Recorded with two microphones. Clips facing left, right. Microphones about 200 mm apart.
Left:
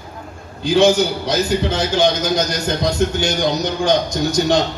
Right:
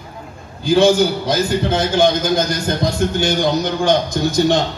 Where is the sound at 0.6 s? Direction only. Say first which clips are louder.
Right 1 dB; 55° right (ahead or behind).